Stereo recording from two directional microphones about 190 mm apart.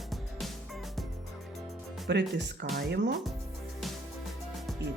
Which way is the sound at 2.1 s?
65° right (ahead or behind).